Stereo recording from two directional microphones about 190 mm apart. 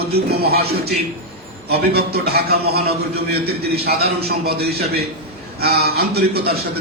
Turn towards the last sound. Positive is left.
turn(degrees=-55)  # may be behind; listen again after turning